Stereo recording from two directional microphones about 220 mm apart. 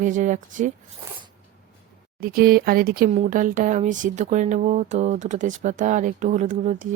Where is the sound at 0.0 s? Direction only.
35° right (ahead or behind).